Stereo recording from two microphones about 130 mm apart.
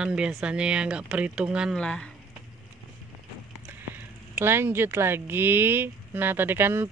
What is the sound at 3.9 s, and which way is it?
Speech, 20° right (ahead or behind).